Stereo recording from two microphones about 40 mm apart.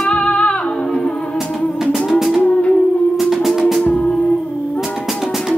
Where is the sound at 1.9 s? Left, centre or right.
Centre.